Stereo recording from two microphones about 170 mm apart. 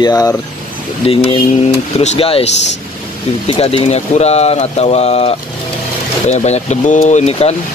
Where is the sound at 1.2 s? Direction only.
35° left (ahead or behind).